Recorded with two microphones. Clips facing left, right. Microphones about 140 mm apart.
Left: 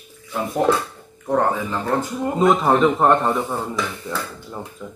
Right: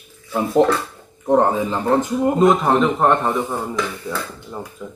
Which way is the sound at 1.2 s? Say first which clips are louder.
Right 4 dB; 20° right (ahead or behind).